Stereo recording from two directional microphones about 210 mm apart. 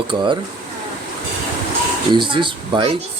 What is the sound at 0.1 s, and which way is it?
Speech, 20° right (ahead or behind).